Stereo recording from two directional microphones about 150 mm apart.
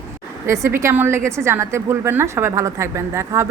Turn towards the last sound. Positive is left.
turn(degrees=-20)  # may be behind; listen again after turning